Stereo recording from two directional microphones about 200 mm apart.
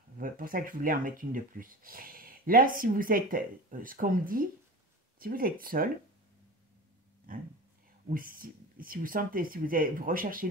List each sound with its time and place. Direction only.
0.2 s speech: 45° right (ahead or behind)
7.3 s speech: 45° right (ahead or behind)